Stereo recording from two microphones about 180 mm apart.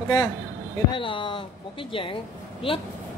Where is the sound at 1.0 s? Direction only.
30° left (ahead or behind).